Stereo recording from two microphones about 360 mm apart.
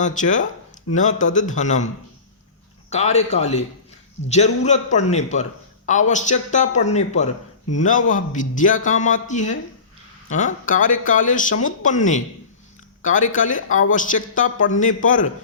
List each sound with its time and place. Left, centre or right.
0.0 s speech: left
2.9 s a man's voice: centre